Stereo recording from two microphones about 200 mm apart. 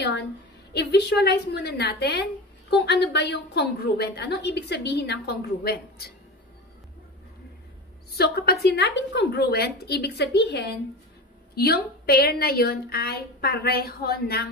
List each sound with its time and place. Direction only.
0.7 s a woman's voice: 55° left (ahead or behind)
8.2 s a woman's voice: 55° left (ahead or behind)